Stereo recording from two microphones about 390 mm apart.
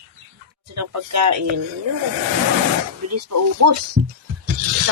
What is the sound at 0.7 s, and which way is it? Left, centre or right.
Speech, right.